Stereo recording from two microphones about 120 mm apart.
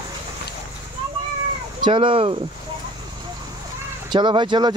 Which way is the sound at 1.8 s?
45° right (ahead or behind).